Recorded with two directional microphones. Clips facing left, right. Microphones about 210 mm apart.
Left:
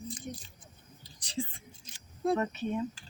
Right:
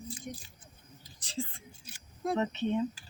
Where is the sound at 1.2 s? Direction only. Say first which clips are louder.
Left 2 dB; 15° left (ahead or behind).